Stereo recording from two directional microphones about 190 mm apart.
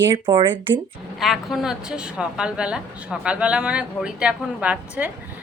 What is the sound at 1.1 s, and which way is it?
A woman's voice, centre (ahead or behind).